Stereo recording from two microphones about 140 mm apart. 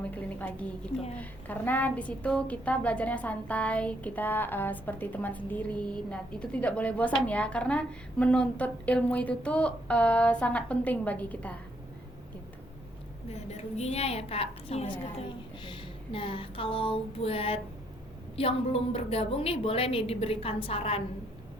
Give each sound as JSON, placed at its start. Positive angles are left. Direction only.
{"t": 0.0, "sound": "a woman's voice", "side_deg": 10}
{"t": 13.5, "sound": "a woman's voice", "side_deg": 50}
{"t": 15.6, "sound": "a sound", "side_deg": 40}
{"t": 18.3, "sound": "a woman's voice", "side_deg": 45}